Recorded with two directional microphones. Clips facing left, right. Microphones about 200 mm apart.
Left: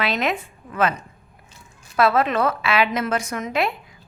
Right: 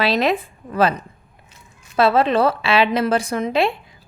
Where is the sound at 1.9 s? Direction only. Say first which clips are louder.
Right 3 dB; 30° right (ahead or behind).